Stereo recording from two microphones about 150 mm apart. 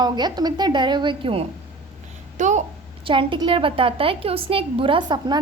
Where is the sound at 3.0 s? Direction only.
35° right (ahead or behind).